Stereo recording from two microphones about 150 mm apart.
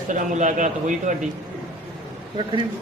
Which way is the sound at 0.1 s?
55° right (ahead or behind).